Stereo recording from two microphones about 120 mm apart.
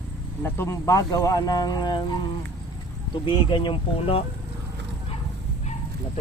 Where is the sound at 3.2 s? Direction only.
45° left (ahead or behind).